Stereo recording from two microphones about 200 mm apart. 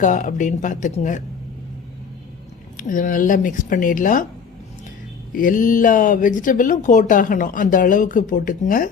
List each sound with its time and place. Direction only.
0.0 s speech: 40° left (ahead or behind)
2.7 s speech: 40° left (ahead or behind)
5.3 s speech: 40° left (ahead or behind)